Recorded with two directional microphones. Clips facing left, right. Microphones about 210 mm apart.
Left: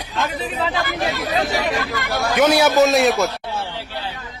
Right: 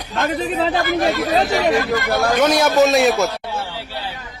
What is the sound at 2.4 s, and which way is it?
Speech, 5° left (ahead or behind).